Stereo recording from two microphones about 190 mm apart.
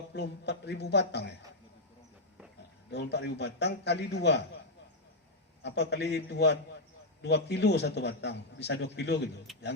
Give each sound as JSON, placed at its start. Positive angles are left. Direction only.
{"t": 0.1, "sound": "a man's voice", "side_deg": 60}
{"t": 2.9, "sound": "a man's voice", "side_deg": 60}
{"t": 5.6, "sound": "a man's voice", "side_deg": 65}